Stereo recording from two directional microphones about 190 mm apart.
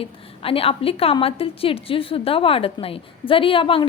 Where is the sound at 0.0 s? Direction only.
30° left (ahead or behind).